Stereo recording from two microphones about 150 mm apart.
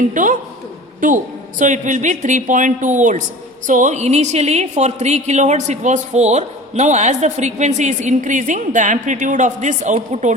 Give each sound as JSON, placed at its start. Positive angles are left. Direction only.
{"t": 0.1, "sound": "a woman's voice", "side_deg": -60}